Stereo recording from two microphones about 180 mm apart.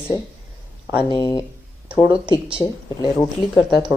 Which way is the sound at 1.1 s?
25° left (ahead or behind).